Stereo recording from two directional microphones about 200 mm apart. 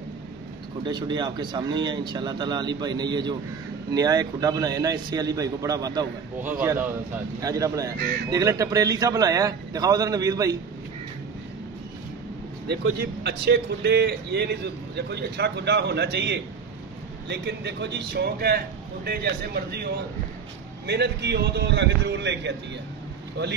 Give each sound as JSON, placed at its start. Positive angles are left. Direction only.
{"t": 0.8, "sound": "a man's voice", "side_deg": -20}
{"t": 13.0, "sound": "a man's voice", "side_deg": -55}